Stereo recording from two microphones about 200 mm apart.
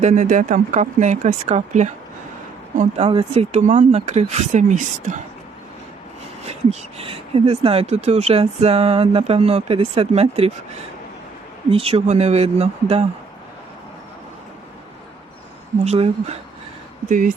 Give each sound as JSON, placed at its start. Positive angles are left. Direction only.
{"t": 0.0, "sound": "speech", "side_deg": -40}
{"t": 6.5, "sound": "speech", "side_deg": -30}
{"t": 11.7, "sound": "speech", "side_deg": -30}
{"t": 15.8, "sound": "speech", "side_deg": -30}